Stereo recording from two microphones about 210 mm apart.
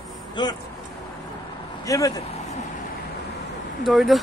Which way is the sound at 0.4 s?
20° left (ahead or behind).